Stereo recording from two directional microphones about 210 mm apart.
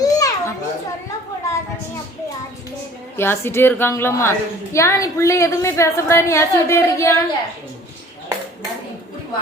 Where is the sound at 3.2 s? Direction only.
10° left (ahead or behind).